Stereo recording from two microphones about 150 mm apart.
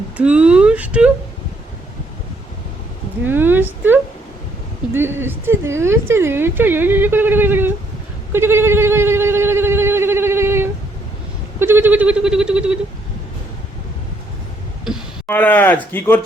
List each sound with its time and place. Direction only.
0.2 s a woman's voice: 10° right (ahead or behind)
3.2 s a woman's voice: 15° right (ahead or behind)
8.3 s goat: 15° right (ahead or behind)
11.6 s a woman's voice: 15° right (ahead or behind)
15.3 s speech: 10° left (ahead or behind)